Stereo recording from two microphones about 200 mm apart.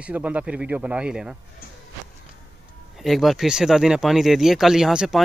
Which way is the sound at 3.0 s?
Centre (ahead or behind).